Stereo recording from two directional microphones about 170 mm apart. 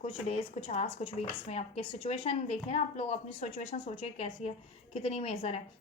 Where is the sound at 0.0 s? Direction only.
40° left (ahead or behind).